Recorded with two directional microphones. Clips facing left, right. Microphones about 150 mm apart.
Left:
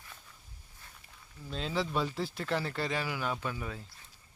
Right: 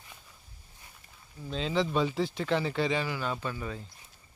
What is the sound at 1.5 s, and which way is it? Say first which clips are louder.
Speech: right 4 dB; 5° left (ahead or behind).